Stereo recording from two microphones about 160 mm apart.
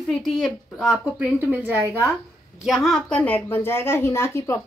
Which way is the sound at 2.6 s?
Centre (ahead or behind).